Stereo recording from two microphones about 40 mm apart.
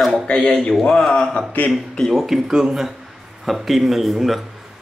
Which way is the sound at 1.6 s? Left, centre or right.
Left.